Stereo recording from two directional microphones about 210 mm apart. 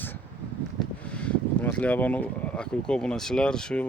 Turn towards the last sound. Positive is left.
turn(degrees=5)  # may be behind; listen again after turning